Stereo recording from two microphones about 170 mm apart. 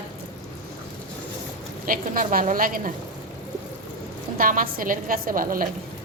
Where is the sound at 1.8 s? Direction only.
55° right (ahead or behind).